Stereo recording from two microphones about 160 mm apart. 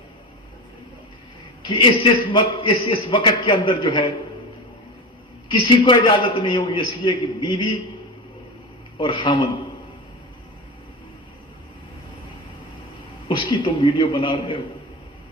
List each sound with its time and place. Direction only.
1.6 s a man's voice: 30° left (ahead or behind)
5.5 s a man's voice: 30° left (ahead or behind)
9.0 s a man's voice: 30° left (ahead or behind)
13.2 s a man's voice: 30° left (ahead or behind)